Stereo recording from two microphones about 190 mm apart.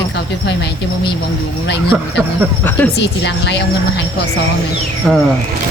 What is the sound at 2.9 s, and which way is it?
Speech, 65° left (ahead or behind).